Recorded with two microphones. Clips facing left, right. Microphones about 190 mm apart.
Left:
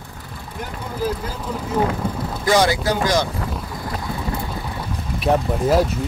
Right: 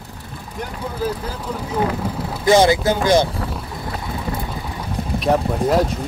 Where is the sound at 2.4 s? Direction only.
25° right (ahead or behind).